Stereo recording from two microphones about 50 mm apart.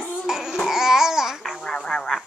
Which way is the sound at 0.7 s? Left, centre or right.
Centre.